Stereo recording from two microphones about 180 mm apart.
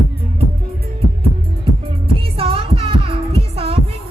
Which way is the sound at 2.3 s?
30° right (ahead or behind).